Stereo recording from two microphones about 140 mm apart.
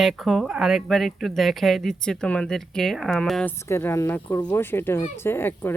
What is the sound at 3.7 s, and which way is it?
Speech, 20° left (ahead or behind).